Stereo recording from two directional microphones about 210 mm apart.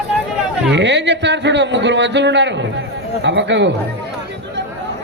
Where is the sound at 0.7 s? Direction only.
55° right (ahead or behind).